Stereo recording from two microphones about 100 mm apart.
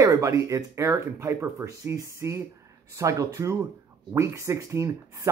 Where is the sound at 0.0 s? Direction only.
35° right (ahead or behind).